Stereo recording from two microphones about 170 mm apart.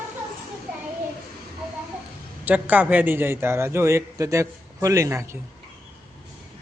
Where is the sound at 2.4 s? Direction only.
10° right (ahead or behind).